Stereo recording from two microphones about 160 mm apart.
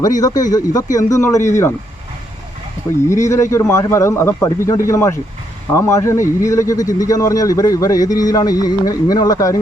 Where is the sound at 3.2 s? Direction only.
20° left (ahead or behind).